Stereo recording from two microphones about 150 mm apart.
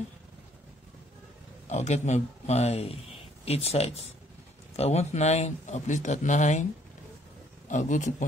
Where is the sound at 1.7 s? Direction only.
50° left (ahead or behind).